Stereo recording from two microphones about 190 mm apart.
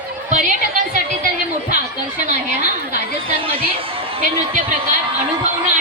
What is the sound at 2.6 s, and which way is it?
Chatter, 40° right (ahead or behind).